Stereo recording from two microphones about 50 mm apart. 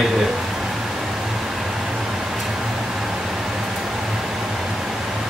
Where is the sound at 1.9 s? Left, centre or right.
Centre.